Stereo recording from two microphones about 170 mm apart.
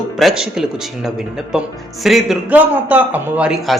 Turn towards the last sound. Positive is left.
turn(degrees=0)  # may be behind; listen again after turning